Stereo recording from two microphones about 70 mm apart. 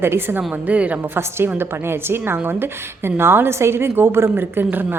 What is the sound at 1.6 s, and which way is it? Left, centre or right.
A woman's voice, right.